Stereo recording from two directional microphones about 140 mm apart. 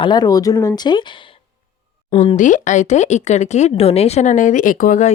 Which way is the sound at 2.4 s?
60° left (ahead or behind).